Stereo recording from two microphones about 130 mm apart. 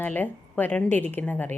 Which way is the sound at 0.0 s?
15° left (ahead or behind).